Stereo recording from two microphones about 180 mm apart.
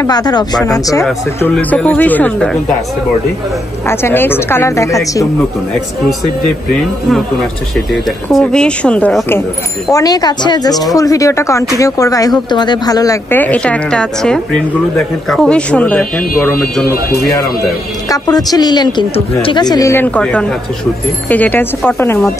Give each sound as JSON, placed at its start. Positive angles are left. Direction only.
{"t": 0.0, "sound": "speech", "side_deg": 20}
{"t": 1.4, "sound": "a woman's voice", "side_deg": 10}
{"t": 3.8, "sound": "a woman's voice", "side_deg": 15}
{"t": 7.9, "sound": "speech", "side_deg": 0}
{"t": 9.8, "sound": "a woman's voice", "side_deg": 20}
{"t": 18.1, "sound": "a woman's voice", "side_deg": 20}